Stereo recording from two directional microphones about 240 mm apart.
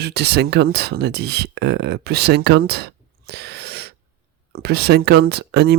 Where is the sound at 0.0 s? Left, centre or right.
Right.